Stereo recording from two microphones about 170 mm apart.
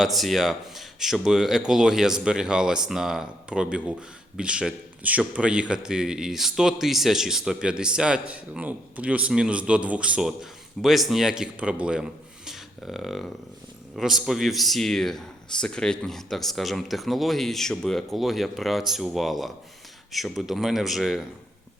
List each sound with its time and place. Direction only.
0.0 s a man's voice: centre (ahead or behind)